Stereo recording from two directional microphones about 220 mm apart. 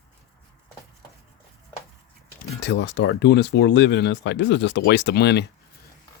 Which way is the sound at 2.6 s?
55° left (ahead or behind).